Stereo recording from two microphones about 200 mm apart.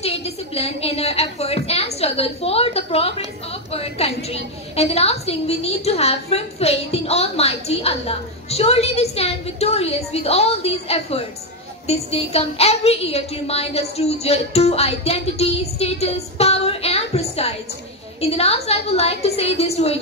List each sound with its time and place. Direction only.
0.0 s a woman's voice: 30° left (ahead or behind)